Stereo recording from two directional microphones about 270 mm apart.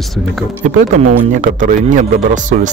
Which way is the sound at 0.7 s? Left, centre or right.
Right.